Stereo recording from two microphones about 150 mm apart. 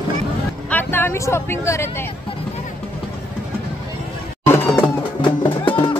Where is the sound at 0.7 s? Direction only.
15° left (ahead or behind).